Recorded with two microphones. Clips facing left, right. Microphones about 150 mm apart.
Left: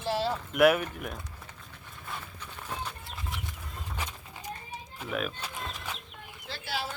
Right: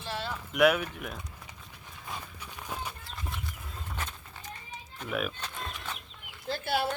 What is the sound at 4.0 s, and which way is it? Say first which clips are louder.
Bird: left 1 dB; 10° left (ahead or behind).